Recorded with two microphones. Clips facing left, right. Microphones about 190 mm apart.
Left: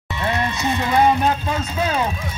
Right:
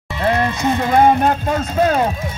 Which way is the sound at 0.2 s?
55° right (ahead or behind).